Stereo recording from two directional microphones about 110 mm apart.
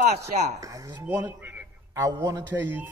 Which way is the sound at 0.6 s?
30° right (ahead or behind).